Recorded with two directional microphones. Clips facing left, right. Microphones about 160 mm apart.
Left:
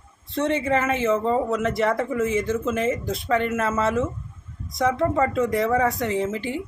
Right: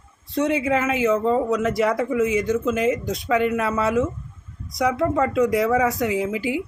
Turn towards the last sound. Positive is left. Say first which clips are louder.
# right 2 dB
turn(degrees=-10)  # may be behind; listen again after turning